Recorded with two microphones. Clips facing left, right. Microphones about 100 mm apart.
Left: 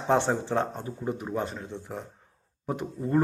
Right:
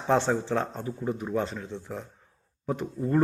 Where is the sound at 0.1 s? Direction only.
20° left (ahead or behind).